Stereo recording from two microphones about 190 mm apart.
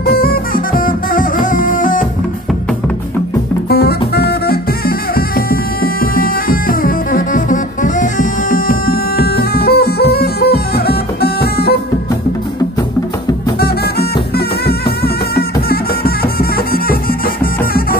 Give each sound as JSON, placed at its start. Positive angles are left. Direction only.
{"t": 0.0, "sound": "music", "side_deg": 50}
{"t": 3.6, "sound": "music", "side_deg": 55}
{"t": 13.6, "sound": "music", "side_deg": 55}